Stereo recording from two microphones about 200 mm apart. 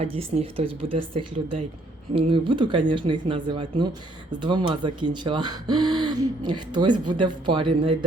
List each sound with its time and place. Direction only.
0.0 s speech: 30° right (ahead or behind)
2.1 s speech: 25° right (ahead or behind)